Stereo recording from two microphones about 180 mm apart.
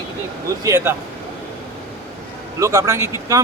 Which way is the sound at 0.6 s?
15° right (ahead or behind).